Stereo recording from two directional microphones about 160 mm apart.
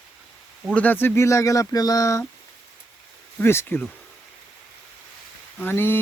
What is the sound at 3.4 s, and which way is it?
Speech, 15° left (ahead or behind).